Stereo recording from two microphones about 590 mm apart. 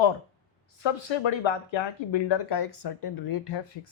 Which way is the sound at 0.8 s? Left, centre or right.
Left.